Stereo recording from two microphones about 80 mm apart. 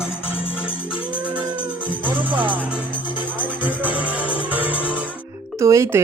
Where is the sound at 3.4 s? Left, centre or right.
Right.